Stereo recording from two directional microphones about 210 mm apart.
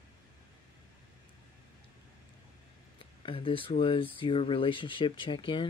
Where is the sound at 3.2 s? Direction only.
25° left (ahead or behind).